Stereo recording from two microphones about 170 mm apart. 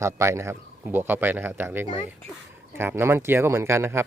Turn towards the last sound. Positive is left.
turn(degrees=-15)  # may be behind; listen again after turning